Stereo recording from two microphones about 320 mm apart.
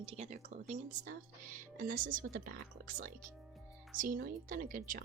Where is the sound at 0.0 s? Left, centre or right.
Centre.